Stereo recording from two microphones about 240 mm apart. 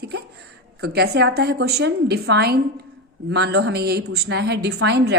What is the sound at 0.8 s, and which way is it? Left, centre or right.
A woman's voice, right.